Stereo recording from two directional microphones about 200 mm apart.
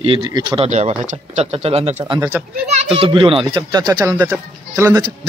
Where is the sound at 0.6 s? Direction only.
35° right (ahead or behind).